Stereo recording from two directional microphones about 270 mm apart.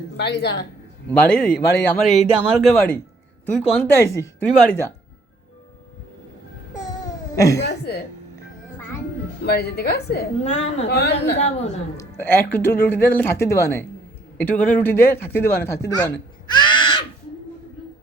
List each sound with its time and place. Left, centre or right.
0.2 s a woman's voice: left
1.6 s speech: centre
7.3 s speech: centre
7.6 s a woman's voice: left
9.4 s a woman's voice: left
10.5 s a woman's voice: left
10.8 s a woman's voice: left
11.3 s a woman's voice: left
11.9 s speech: centre
16.5 s crow: centre